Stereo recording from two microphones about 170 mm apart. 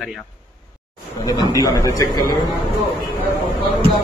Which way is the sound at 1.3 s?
25° left (ahead or behind).